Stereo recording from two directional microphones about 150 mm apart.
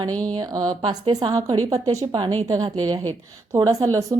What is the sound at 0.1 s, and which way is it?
Speech, 10° left (ahead or behind).